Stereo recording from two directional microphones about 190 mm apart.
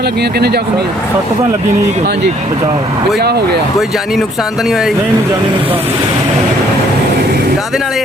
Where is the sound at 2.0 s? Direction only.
60° right (ahead or behind).